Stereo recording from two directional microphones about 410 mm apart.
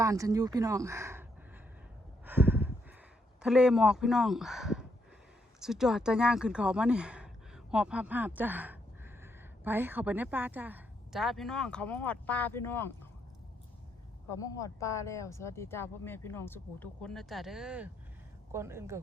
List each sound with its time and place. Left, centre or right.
0.0 s speech: centre
2.2 s a sound: centre
3.4 s speech: centre
14.3 s speech: centre